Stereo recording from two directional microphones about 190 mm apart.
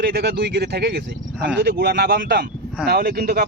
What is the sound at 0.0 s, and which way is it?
Speech, 55° right (ahead or behind).